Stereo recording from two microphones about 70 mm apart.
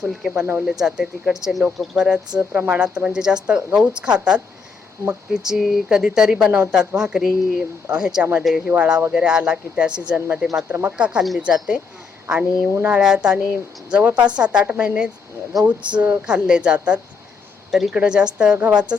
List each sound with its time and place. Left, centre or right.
0.0 s speech: centre
0.3 s speech: right
0.6 s speech: centre
5.5 s speech: centre
10.7 s speech: right
10.9 s speech: centre
11.2 s a woman's voice: centre
13.9 s speech: right
14.3 s speech: centre
17.7 s speech: centre